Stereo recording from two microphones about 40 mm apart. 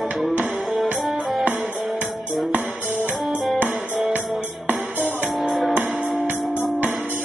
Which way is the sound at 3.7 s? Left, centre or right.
Centre.